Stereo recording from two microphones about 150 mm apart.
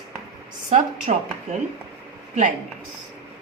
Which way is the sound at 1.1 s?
50° right (ahead or behind).